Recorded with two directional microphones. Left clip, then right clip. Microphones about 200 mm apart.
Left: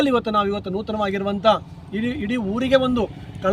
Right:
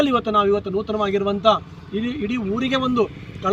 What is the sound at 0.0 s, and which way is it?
A man's voice, 30° left (ahead or behind).